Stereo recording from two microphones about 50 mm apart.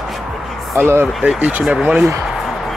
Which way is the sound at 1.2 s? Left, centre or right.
Right.